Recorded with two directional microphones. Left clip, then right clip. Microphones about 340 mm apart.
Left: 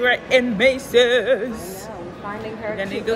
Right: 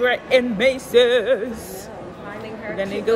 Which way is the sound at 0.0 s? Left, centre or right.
Centre.